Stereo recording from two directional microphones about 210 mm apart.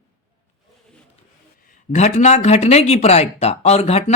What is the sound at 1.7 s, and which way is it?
Speech, 35° left (ahead or behind).